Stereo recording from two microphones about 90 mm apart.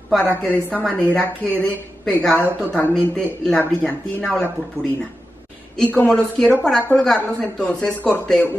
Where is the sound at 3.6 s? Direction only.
15° left (ahead or behind).